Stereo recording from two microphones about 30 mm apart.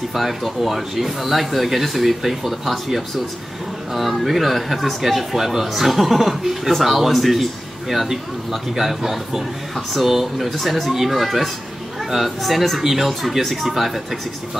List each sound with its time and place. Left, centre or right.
0.1 s speech: centre